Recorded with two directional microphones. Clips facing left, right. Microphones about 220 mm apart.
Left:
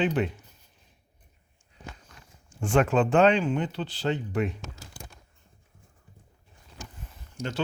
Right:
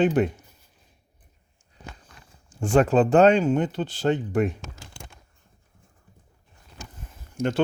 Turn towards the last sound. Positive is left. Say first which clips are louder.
# right 8 dB
turn(degrees=-50)  # may be behind; listen again after turning